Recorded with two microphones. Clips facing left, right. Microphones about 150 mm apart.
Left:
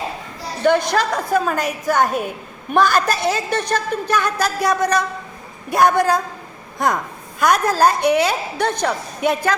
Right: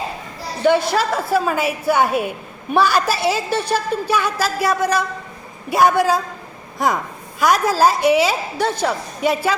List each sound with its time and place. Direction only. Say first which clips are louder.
0.6 s a woman's voice: even; 5° right (ahead or behind)